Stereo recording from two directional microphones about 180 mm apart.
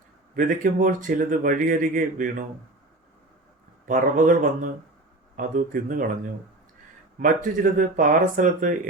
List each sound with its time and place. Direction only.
0.3 s speech: 45° right (ahead or behind)
3.8 s speech: 45° right (ahead or behind)
7.2 s speech: 45° right (ahead or behind)